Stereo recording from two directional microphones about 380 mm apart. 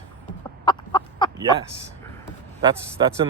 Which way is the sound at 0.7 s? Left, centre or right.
Centre.